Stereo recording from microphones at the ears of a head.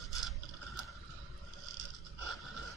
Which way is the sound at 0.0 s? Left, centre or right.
Right.